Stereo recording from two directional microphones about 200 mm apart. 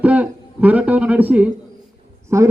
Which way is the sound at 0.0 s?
5° right (ahead or behind).